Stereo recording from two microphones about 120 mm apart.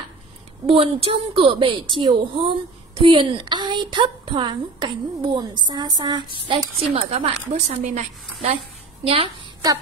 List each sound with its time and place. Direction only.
0.7 s a woman's voice: 50° right (ahead or behind)
6.4 s a woman's voice: 50° right (ahead or behind); by 8.5 s 80° right
9.0 s a child's voice: 50° right (ahead or behind)